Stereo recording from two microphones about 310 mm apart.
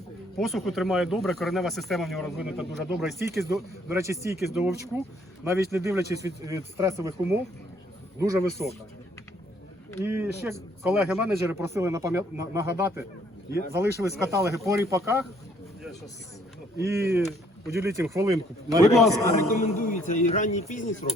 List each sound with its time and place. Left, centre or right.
0.3 s speech: centre
10.0 s speech: centre
16.7 s speech: centre
18.9 s speech: centre
19.5 s a man's voice: left